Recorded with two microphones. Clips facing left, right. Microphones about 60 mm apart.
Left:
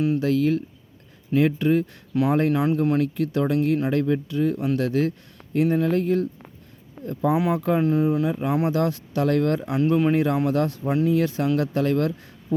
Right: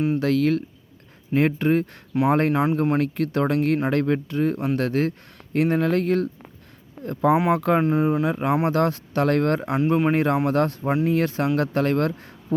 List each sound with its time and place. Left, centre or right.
0.2 s speech: right
1.3 s speech: right
4.3 s speech: right
5.5 s speech: right
7.0 s speech: right
7.8 s speech: right
8.1 s speech: right